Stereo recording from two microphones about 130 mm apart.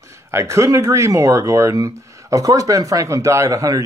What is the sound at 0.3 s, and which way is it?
Speech, 20° right (ahead or behind).